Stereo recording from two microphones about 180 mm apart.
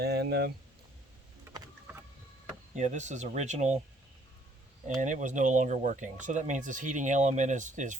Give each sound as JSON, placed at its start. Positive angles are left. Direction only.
{"t": 0.0, "sound": "speech", "side_deg": -65}
{"t": 1.5, "sound": "vehicle", "side_deg": -15}
{"t": 2.7, "sound": "speech", "side_deg": -40}
{"t": 4.9, "sound": "speech", "side_deg": -45}